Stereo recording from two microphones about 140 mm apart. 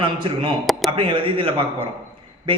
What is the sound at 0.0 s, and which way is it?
A man's voice, 35° right (ahead or behind).